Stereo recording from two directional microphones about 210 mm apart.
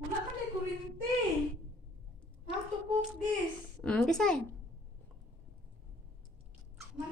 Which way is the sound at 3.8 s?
Centre (ahead or behind).